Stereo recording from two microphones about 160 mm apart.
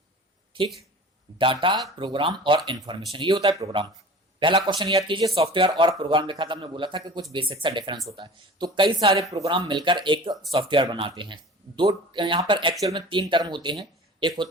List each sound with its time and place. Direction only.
0.5 s speech: 30° right (ahead or behind)